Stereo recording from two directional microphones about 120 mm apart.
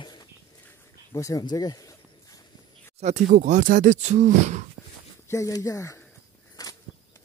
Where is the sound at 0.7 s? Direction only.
25° left (ahead or behind).